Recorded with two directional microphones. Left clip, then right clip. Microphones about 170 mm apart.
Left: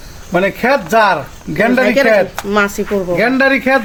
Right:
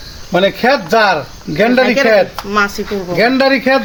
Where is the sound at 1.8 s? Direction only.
60° left (ahead or behind).